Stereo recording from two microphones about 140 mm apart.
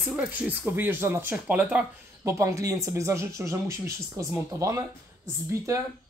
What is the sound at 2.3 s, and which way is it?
Speech, 20° right (ahead or behind).